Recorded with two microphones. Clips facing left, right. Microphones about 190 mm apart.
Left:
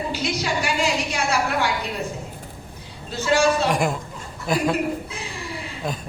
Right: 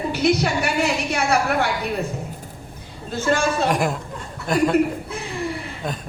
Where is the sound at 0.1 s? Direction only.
60° right (ahead or behind).